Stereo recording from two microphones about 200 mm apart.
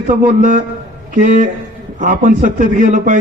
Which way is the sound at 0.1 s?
40° right (ahead or behind).